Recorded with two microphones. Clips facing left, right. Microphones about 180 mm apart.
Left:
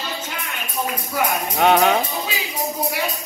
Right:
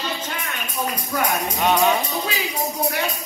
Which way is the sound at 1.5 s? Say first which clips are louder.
Left 4 dB; 60° left (ahead or behind).